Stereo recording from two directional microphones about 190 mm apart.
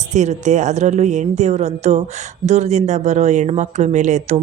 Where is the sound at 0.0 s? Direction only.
40° right (ahead or behind).